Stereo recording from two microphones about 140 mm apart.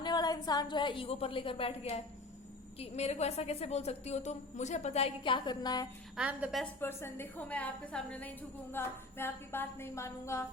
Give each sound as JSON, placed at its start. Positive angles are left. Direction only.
{"t": 0.0, "sound": "a woman's voice", "side_deg": 30}
{"t": 6.1, "sound": "a woman's voice", "side_deg": -10}
{"t": 6.7, "sound": "music", "side_deg": 15}